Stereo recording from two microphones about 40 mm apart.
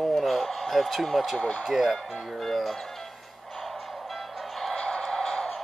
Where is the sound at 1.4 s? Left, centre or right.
Left.